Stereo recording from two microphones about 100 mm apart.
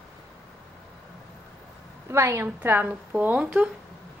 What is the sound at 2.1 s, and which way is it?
A woman's voice, 25° right (ahead or behind).